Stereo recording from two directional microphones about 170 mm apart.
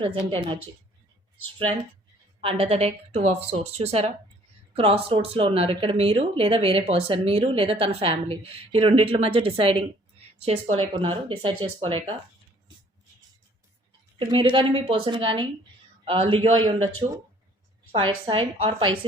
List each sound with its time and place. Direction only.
0.0 s speech: 30° right (ahead or behind)
2.4 s speech: 35° right (ahead or behind)
14.2 s speech: 30° right (ahead or behind)
17.9 s speech: 30° right (ahead or behind)